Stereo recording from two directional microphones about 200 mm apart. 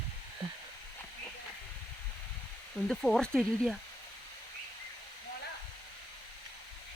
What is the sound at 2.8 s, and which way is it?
Speech, centre (ahead or behind).